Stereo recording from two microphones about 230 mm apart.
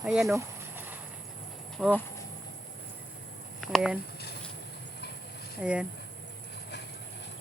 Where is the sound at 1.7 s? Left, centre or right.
Centre.